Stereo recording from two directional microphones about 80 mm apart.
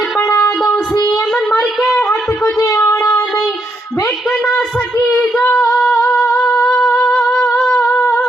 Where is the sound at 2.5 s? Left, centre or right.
Left.